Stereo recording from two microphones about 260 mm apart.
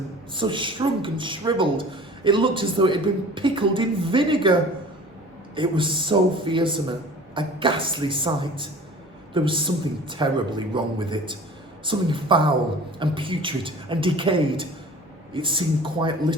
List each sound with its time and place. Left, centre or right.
0.3 s a man's voice: centre
5.5 s a man's voice: centre